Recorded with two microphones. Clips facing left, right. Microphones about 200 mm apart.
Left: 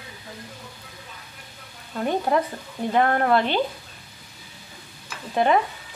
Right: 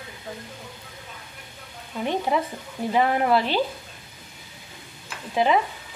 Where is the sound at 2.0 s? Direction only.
5° right (ahead or behind).